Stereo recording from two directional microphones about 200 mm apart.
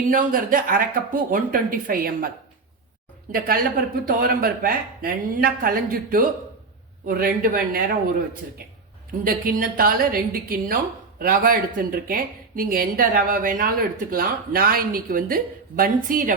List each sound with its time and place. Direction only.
0.1 s speech: 45° right (ahead or behind)
3.3 s speech: 50° right (ahead or behind)
9.2 s speech: 45° right (ahead or behind)